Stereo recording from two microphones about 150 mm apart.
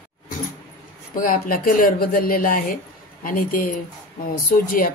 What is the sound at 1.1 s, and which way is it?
Speech, 65° left (ahead or behind).